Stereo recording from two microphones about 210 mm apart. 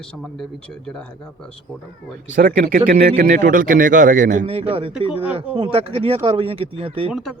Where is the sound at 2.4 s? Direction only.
45° right (ahead or behind).